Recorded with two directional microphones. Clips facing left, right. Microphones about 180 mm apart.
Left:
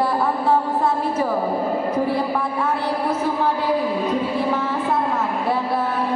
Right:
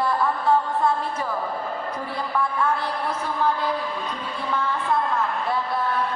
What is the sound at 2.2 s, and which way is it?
Speech, 30° left (ahead or behind).